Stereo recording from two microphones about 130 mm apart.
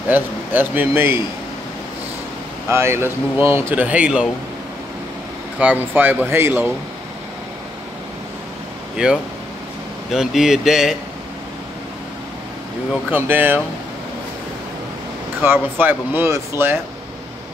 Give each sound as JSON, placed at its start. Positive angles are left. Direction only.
{"t": 0.1, "sound": "speech", "side_deg": -15}
{"t": 2.7, "sound": "speech", "side_deg": -20}
{"t": 5.6, "sound": "a man's voice", "side_deg": -15}
{"t": 8.9, "sound": "speech", "side_deg": -5}
{"t": 13.1, "sound": "speech", "side_deg": -15}
{"t": 15.4, "sound": "speech", "side_deg": -15}